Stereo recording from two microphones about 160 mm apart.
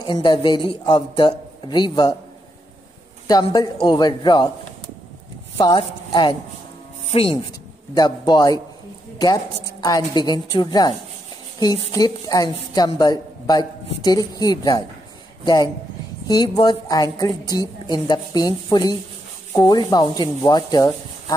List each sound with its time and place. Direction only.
0.0 s a woman's voice: 30° left (ahead or behind)
3.3 s a woman's voice: 25° left (ahead or behind)
5.6 s a woman's voice: 25° left (ahead or behind)
9.8 s a woman's voice: 25° left (ahead or behind)